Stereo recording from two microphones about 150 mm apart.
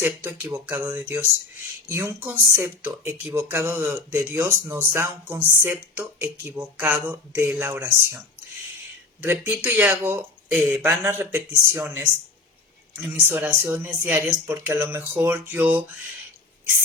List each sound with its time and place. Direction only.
0.0 s speech: 15° right (ahead or behind)
9.2 s speech: 15° right (ahead or behind)